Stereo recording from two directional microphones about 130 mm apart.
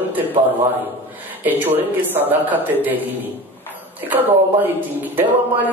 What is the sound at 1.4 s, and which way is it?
Speech, 15° right (ahead or behind).